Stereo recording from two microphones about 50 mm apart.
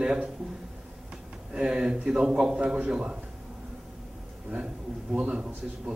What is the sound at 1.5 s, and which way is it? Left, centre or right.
A man's voice, centre.